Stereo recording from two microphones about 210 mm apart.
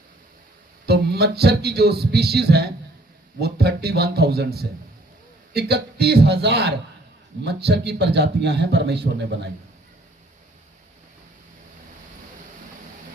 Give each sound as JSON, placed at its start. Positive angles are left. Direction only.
{"t": 0.9, "sound": "a man's voice", "side_deg": -50}